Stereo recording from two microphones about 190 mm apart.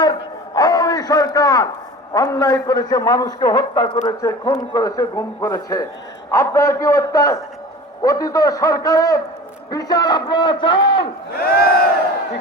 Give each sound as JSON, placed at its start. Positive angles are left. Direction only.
{"t": 0.0, "sound": "a sound", "side_deg": 20}
{"t": 2.1, "sound": "a man's voice", "side_deg": 20}
{"t": 11.3, "sound": "crowd", "side_deg": 55}